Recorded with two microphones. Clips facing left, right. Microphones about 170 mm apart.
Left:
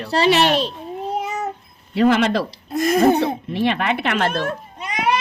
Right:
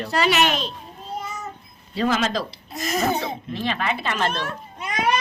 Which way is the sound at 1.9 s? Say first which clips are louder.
Left 6 dB; 60° left (ahead or behind).